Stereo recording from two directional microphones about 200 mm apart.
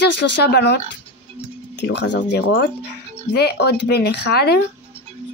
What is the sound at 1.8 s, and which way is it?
Speech, 60° left (ahead or behind).